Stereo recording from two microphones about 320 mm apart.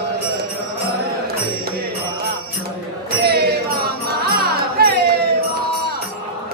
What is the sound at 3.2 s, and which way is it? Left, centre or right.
Music, right.